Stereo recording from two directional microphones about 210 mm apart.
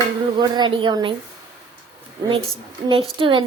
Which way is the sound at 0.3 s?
20° right (ahead or behind).